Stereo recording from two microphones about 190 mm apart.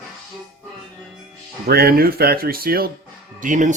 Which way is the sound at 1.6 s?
55° right (ahead or behind).